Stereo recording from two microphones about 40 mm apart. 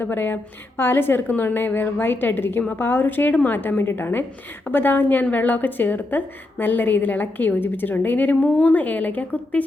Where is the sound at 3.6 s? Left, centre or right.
Left.